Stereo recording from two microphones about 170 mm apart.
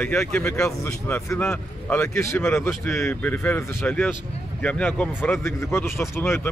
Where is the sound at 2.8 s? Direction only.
5° left (ahead or behind).